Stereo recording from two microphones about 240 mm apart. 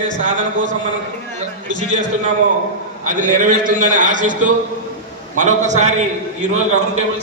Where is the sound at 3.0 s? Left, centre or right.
Right.